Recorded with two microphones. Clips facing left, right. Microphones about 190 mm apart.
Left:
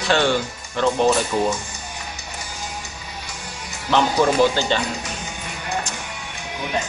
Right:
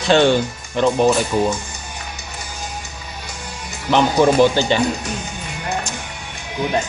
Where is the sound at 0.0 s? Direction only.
20° right (ahead or behind).